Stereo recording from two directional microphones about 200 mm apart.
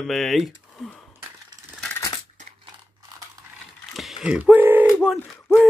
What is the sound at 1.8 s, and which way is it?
Coin, 15° left (ahead or behind).